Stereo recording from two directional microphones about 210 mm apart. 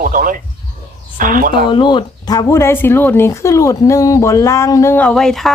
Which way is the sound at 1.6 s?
20° left (ahead or behind).